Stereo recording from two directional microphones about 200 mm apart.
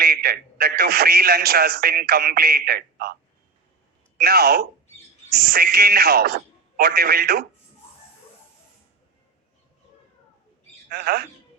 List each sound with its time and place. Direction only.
0.0 s a man's voice: 50° right (ahead or behind)
4.2 s a man's voice: 50° right (ahead or behind)
10.8 s a man's voice: 50° right (ahead or behind)